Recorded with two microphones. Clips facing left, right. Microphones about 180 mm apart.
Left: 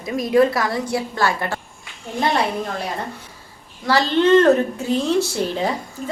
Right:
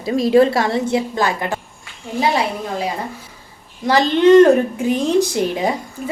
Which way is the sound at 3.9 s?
15° right (ahead or behind).